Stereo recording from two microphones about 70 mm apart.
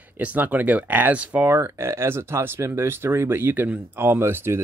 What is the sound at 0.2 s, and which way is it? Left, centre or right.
Speech, right.